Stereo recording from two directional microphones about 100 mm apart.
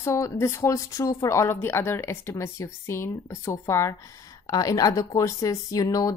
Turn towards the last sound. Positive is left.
turn(degrees=35)  # may be behind; listen again after turning